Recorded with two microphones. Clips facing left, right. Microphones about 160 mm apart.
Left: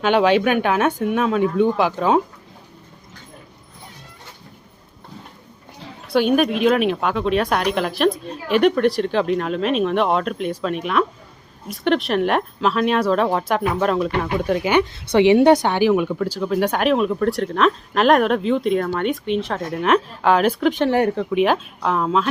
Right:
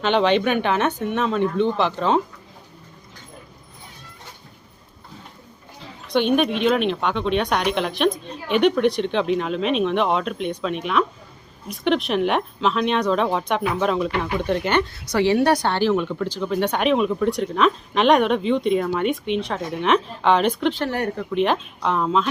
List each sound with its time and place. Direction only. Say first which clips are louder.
0.0 s speech: left 2 dB; 5° left (ahead or behind)
6.1 s speech: left 2 dB; 5° left (ahead or behind)
20.7 s speech: left 6 dB; 20° left (ahead or behind)
21.3 s speech: left 1 dB; 5° left (ahead or behind)